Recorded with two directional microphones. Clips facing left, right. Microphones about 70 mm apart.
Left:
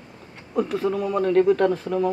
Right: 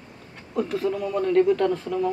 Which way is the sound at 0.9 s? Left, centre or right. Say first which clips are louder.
Left 1 dB; left.